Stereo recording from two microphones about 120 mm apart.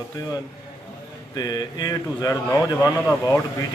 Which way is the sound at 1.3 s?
35° left (ahead or behind).